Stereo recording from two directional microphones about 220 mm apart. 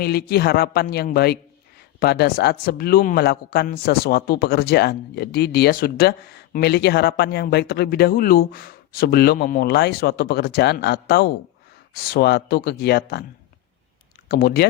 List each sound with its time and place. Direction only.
0.0 s speech: 45° left (ahead or behind)
14.3 s speech: 45° left (ahead or behind)